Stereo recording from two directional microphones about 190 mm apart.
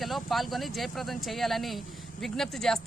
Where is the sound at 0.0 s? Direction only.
Centre (ahead or behind).